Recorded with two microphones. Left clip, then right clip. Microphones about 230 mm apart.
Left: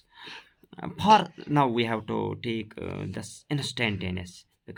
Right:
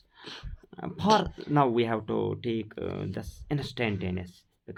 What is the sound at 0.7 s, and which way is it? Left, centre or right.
Speech, left.